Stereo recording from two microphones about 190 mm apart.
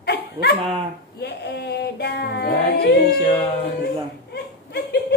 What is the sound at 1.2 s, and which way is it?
Music, 60° left (ahead or behind).